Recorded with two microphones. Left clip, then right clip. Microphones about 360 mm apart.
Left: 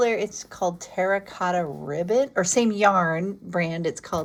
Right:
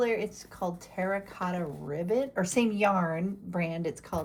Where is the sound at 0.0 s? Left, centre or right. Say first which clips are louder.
Left 6 dB; left.